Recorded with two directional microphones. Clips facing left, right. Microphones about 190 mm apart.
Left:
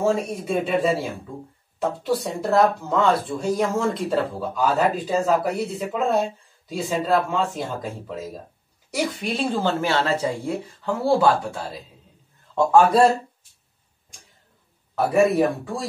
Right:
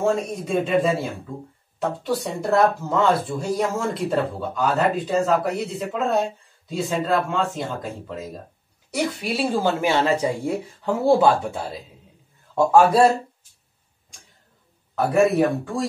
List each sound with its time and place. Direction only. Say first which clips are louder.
0.0 s speech: even; 5° left (ahead or behind)
9.1 s speech: right 1 dB; 5° right (ahead or behind)
12.5 s speech: even; 5° right (ahead or behind)
15.0 s speech: even; 5° left (ahead or behind)